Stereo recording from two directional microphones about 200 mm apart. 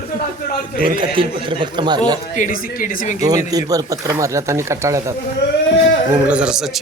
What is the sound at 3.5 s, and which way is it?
Speech, 20° right (ahead or behind).